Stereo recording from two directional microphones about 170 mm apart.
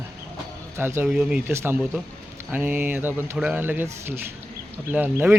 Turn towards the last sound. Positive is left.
turn(degrees=-10)  # may be behind; listen again after turning